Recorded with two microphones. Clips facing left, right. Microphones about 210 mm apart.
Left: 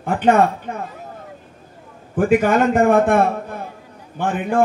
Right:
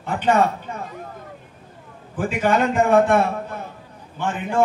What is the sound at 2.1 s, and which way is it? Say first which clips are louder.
A man's voice: left 5 dB; 50° left (ahead or behind).